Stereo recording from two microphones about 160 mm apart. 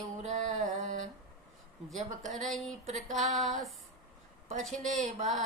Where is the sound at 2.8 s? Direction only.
50° right (ahead or behind).